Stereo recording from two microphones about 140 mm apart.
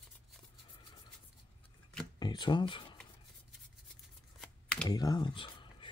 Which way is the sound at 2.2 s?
30° left (ahead or behind).